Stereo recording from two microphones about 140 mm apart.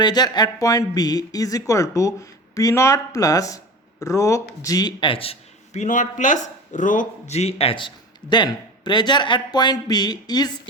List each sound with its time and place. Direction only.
0.0 s speech: 30° left (ahead or behind)